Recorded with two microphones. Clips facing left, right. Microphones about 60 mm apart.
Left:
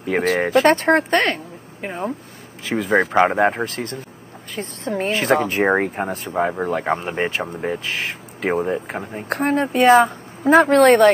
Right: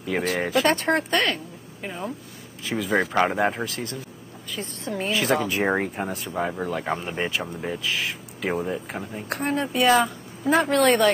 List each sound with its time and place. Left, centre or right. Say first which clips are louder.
0.4 s speech: left 7 dB; left
3.6 s speech: left 4 dB; left